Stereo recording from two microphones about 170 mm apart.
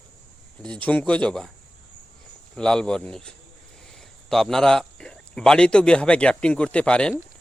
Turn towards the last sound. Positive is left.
turn(degrees=5)  # may be behind; listen again after turning